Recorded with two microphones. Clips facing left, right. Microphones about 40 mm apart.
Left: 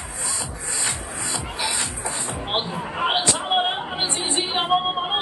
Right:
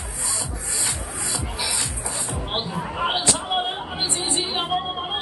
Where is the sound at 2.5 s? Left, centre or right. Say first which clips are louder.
Left 2 dB; centre.